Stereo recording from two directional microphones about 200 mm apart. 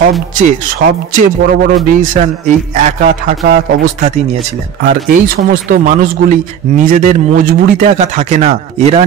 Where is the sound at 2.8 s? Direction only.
40° right (ahead or behind).